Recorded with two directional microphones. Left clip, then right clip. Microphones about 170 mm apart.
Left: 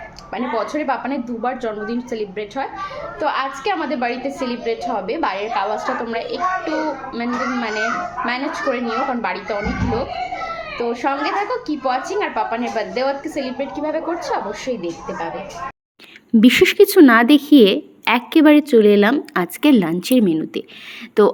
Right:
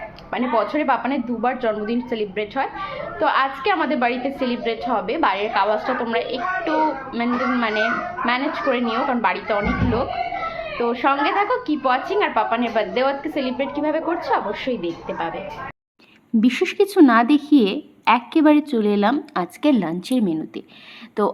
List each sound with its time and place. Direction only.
0.3 s a woman's voice: 10° left (ahead or behind)
16.4 s a woman's voice: 20° left (ahead or behind)